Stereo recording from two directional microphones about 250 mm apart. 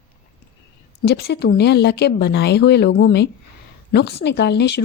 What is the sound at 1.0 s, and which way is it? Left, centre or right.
A woman's voice, left.